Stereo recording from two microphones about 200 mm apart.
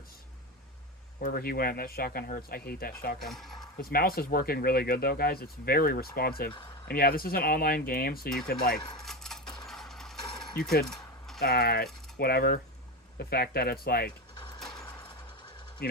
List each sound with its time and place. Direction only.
1.2 s speech: 45° left (ahead or behind)
3.2 s speech: centre (ahead or behind)
3.8 s speech: 50° left (ahead or behind)
9.0 s keys jangling: centre (ahead or behind)
9.6 s mechanisms: centre (ahead or behind)
10.8 s keys jangling: centre (ahead or behind)
11.3 s speech: 50° left (ahead or behind)
15.8 s speech: 50° left (ahead or behind)